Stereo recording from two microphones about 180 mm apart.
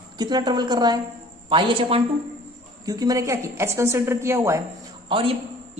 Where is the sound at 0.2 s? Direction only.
25° right (ahead or behind).